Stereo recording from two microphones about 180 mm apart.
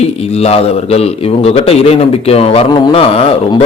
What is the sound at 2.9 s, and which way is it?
Speech, 35° left (ahead or behind).